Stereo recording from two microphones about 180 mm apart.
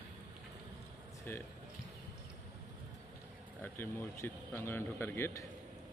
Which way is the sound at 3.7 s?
10° left (ahead or behind).